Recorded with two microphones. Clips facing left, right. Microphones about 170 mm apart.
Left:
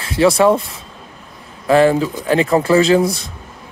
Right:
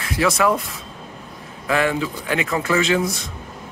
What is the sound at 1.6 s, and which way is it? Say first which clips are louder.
Speech: left 8 dB; 35° left (ahead or behind).